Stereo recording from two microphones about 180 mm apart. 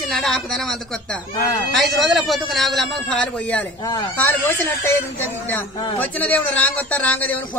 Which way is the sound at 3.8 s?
25° left (ahead or behind).